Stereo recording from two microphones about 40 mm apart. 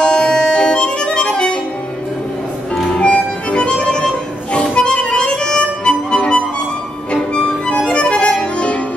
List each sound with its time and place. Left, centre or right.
0.0 s music: left
2.7 s music: centre
3.1 s music: left
4.7 s harmonica: left
7.3 s music: centre